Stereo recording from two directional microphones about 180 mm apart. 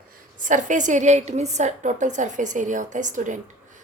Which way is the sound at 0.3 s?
45° right (ahead or behind).